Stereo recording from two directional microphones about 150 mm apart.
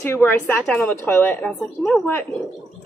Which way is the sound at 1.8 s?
Centre (ahead or behind).